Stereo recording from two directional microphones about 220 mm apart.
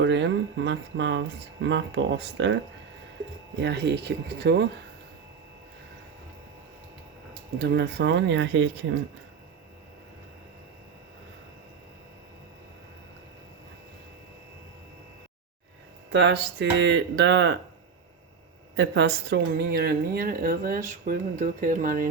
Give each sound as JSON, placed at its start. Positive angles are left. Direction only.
{"t": 0.0, "sound": "speech", "side_deg": -55}
{"t": 3.6, "sound": "speech", "side_deg": -50}
{"t": 7.6, "sound": "speech", "side_deg": -50}
{"t": 16.1, "sound": "speech", "side_deg": -50}
{"t": 18.8, "sound": "speech", "side_deg": -50}